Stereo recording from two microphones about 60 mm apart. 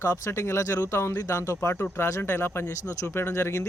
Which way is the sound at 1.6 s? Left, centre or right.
Left.